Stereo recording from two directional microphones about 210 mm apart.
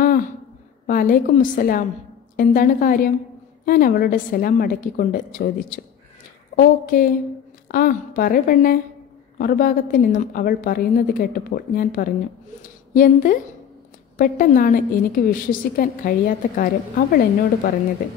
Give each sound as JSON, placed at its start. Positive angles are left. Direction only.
{"t": 0.8, "sound": "a woman's voice", "side_deg": 40}